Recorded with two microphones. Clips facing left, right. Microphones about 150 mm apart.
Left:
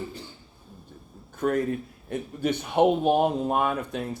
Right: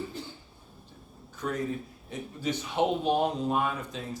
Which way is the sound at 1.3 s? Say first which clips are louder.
Left 7 dB; 55° left (ahead or behind).